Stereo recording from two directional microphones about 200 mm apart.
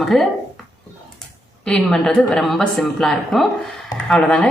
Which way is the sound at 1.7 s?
5° left (ahead or behind).